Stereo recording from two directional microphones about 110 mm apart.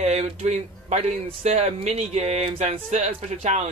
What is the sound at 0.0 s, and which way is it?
Speech, 85° right.